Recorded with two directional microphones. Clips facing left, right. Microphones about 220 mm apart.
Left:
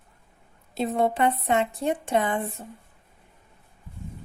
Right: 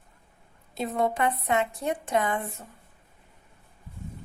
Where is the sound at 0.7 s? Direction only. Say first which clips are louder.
Left 3 dB; 30° left (ahead or behind).